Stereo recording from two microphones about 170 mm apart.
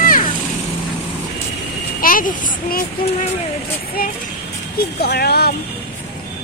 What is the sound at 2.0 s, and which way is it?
Speech, 55° left (ahead or behind).